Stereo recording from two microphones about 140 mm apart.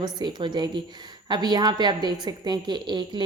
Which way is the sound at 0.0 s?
30° right (ahead or behind).